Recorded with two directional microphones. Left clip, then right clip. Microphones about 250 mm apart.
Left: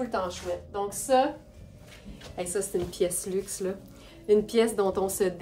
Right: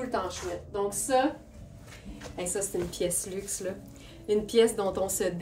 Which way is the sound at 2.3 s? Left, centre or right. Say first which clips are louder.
Left 2 dB; left.